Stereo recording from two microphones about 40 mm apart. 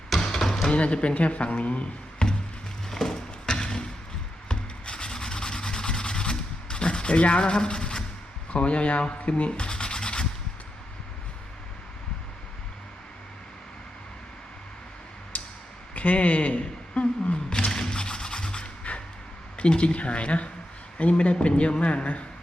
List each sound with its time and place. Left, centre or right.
0.2 s a sound: centre
0.7 s speech: left
2.9 s music: centre
4.4 s rub: left
7.2 s speech: left
8.5 s speech: left
15.3 s a sound: left
16.0 s speech: left
17.7 s music: centre
19.5 s speech: left